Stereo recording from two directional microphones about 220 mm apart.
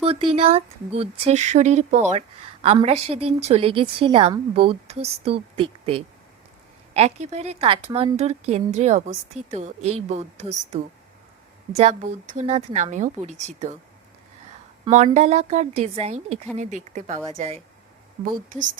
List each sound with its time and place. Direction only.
0.0 s speech: 25° right (ahead or behind)
11.8 s speech: 30° right (ahead or behind)
14.8 s speech: 30° right (ahead or behind)